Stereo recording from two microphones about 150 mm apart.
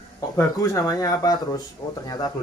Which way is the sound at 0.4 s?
20° left (ahead or behind).